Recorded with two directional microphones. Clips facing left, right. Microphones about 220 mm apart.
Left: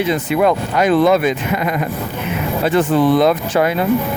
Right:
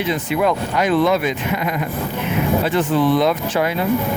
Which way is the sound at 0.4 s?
45° left (ahead or behind).